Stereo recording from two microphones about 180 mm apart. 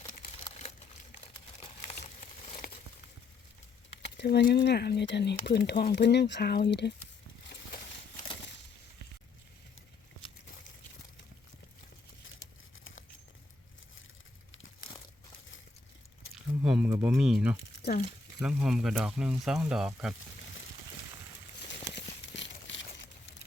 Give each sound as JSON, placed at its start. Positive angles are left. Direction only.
{"t": 1.9, "sound": "a sound", "side_deg": 40}
{"t": 4.2, "sound": "speech", "side_deg": 70}
{"t": 14.5, "sound": "crumpling", "side_deg": 90}
{"t": 16.3, "sound": "a sound", "side_deg": -5}
{"t": 18.3, "sound": "speech", "side_deg": -5}
{"t": 21.9, "sound": "crumpling", "side_deg": 85}